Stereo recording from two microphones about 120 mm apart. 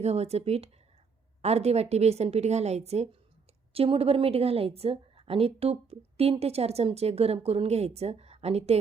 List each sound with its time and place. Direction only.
0.0 s a woman's voice: 60° right (ahead or behind)
3.8 s a woman's voice: 55° right (ahead or behind)